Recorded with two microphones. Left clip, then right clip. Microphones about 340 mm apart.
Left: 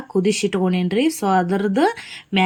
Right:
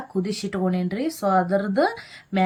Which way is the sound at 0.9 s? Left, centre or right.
Left.